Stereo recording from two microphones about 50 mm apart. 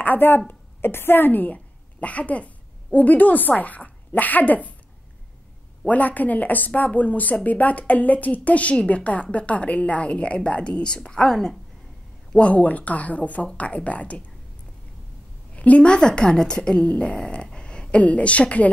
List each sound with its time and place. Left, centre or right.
0.0 s a woman's voice: left
5.9 s a woman's voice: left; by 11.5 s centre
12.3 s a woman's voice: left
15.5 s a woman's voice: left